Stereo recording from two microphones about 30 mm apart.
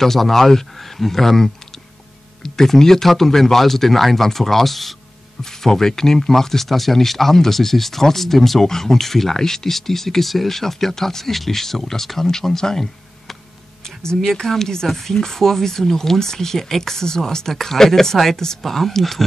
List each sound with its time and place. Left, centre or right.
0.0 s speech: centre
5.4 s speech: centre
13.8 s speech: left